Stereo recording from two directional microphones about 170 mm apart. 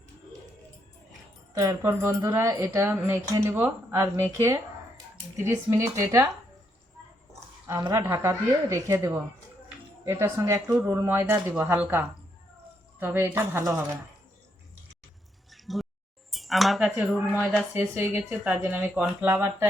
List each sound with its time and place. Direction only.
1.5 s speech: 15° right (ahead or behind)
7.7 s speech: 20° right (ahead or behind)
15.5 s a sound: centre (ahead or behind)
16.3 s speech: centre (ahead or behind)